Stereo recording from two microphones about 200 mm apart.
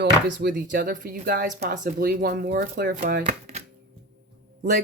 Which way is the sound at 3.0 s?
35° right (ahead or behind).